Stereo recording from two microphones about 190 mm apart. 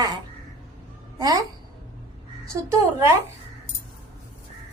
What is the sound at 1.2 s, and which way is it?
Speech, 20° right (ahead or behind).